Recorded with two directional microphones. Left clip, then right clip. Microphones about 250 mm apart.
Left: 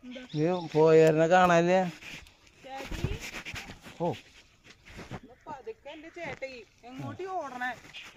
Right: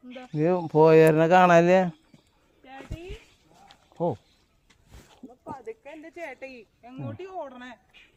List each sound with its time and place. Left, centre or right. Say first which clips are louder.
0.3 s speech: right 5 dB; right
3.9 s speech: right 4 dB; right
5.5 s speech: right 3 dB; centre